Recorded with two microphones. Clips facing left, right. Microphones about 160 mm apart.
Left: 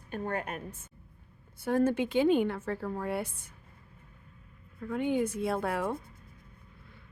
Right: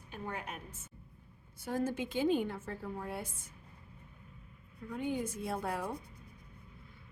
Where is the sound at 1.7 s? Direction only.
65° left (ahead or behind).